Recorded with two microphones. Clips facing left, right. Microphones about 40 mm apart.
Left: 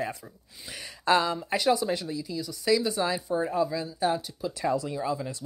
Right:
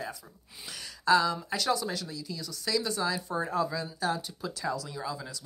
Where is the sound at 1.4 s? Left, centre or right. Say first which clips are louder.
Left 5 dB; centre.